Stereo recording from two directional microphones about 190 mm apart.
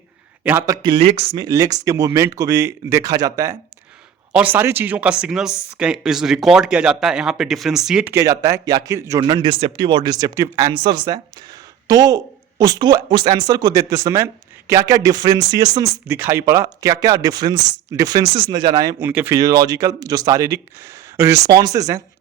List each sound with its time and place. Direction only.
0.4 s speech: 15° right (ahead or behind); by 1.5 s 30° right (ahead or behind)
1.5 s speech: 20° right (ahead or behind)